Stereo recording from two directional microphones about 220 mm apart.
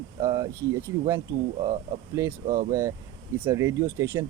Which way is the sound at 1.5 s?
25° right (ahead or behind).